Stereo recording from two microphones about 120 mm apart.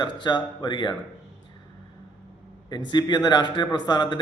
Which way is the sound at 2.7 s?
40° left (ahead or behind).